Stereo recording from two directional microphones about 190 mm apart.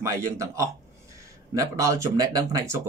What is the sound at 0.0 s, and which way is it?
Speech, 15° right (ahead or behind).